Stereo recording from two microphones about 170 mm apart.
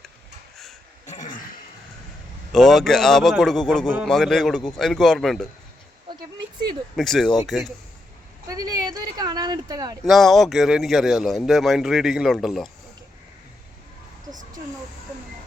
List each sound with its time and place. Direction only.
1.0 s throat clearing: 45° left (ahead or behind)
2.5 s speech: centre (ahead or behind)
6.9 s speech: centre (ahead or behind)
8.4 s a sound: 20° right (ahead or behind)
10.0 s speech: centre (ahead or behind)